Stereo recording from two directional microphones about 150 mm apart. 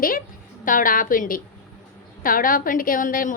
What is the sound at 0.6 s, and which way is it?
A woman's voice, 65° left (ahead or behind).